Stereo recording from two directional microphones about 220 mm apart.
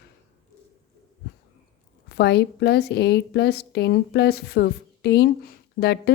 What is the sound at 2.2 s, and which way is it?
A woman's voice, 50° left (ahead or behind).